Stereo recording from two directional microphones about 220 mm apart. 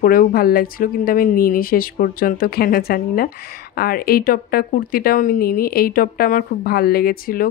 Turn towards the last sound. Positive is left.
turn(degrees=40)  # may be behind; listen again after turning